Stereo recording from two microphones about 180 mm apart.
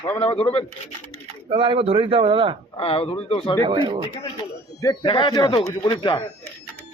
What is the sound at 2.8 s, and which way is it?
Speech, 30° left (ahead or behind).